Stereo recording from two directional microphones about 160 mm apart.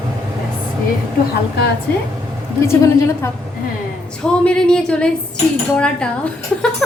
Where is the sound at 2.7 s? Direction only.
20° left (ahead or behind).